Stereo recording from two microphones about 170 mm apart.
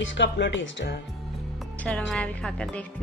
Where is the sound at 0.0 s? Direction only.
90° left.